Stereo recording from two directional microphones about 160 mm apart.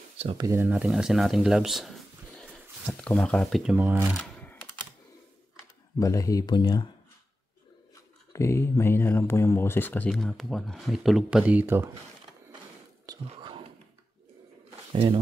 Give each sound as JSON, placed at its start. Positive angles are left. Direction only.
{"t": 0.4, "sound": "speech", "side_deg": -15}
{"t": 3.7, "sound": "speech", "side_deg": -10}
{"t": 4.2, "sound": "typing", "side_deg": 10}
{"t": 5.9, "sound": "speech", "side_deg": 20}
{"t": 8.3, "sound": "speech", "side_deg": 15}
{"t": 13.2, "sound": "whispering", "side_deg": -35}
{"t": 14.9, "sound": "speech", "side_deg": -40}